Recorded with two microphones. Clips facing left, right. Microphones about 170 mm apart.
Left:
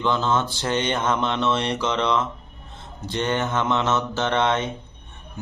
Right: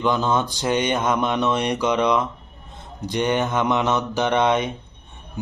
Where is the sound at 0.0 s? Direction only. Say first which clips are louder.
Right 2 dB; 15° right (ahead or behind).